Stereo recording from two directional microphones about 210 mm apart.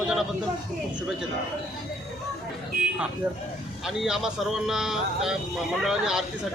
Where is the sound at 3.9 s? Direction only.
Centre (ahead or behind).